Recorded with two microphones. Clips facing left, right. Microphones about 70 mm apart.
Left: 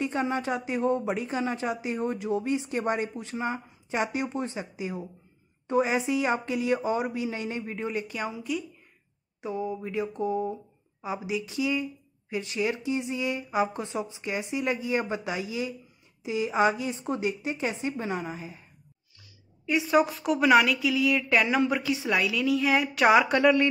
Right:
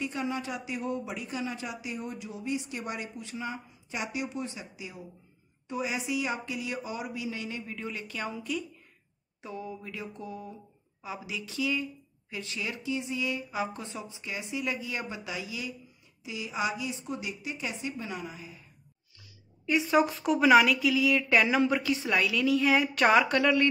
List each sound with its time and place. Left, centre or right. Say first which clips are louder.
0.0 s speech: left 5 dB; left; by 8.3 s centre
8.3 s speech: left 2 dB; centre
9.4 s speech: left 8 dB; centre; by 18.6 s left
19.6 s speech: left 2 dB; centre